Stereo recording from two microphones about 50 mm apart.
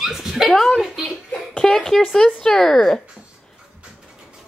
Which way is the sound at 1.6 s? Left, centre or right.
Centre.